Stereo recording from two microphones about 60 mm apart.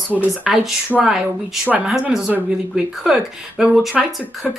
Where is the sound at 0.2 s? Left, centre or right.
Centre.